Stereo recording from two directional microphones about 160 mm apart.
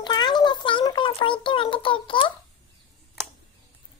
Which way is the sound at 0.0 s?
25° left (ahead or behind).